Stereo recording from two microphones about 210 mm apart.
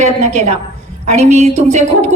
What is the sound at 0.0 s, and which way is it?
A woman's voice, 35° right (ahead or behind).